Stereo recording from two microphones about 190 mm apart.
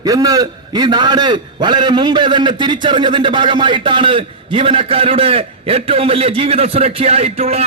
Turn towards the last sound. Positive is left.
turn(degrees=-35)  # may be behind; listen again after turning